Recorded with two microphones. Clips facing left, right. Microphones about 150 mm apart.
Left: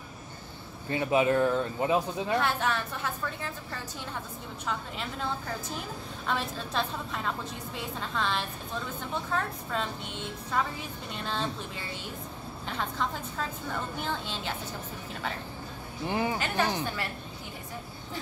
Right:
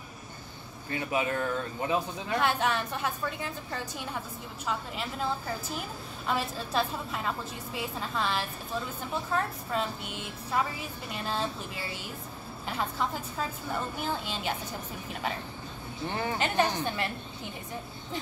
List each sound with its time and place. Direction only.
0.8 s speech: 25° left (ahead or behind)
2.4 s a woman's voice: 15° right (ahead or behind)
16.1 s speech: 15° left (ahead or behind)
16.3 s a woman's voice: 20° right (ahead or behind)